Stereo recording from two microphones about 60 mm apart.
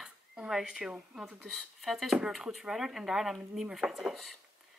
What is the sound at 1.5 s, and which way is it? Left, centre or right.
Speech, centre.